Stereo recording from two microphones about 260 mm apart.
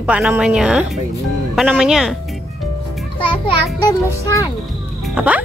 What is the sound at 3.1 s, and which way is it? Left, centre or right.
A child's voice, centre.